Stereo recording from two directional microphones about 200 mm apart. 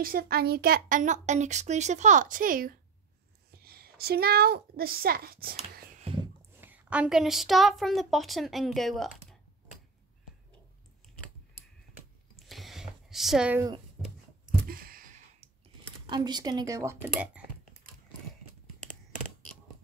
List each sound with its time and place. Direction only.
0.0 s a woman's voice: 50° right (ahead or behind)
5.9 s a sound: 30° right (ahead or behind)
6.6 s a woman's voice: 10° right (ahead or behind)
12.4 s a sound: centre (ahead or behind)
14.7 s sigh: 45° right (ahead or behind)
16.1 s a woman's voice: 20° right (ahead or behind)